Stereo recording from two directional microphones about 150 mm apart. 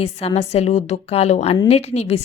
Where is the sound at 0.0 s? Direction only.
45° left (ahead or behind).